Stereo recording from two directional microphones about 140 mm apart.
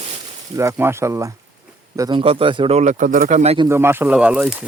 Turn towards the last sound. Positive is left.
turn(degrees=-10)  # may be behind; listen again after turning